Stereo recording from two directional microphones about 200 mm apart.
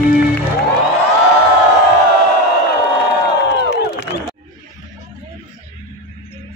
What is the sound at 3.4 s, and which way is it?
Crowd, 55° left (ahead or behind).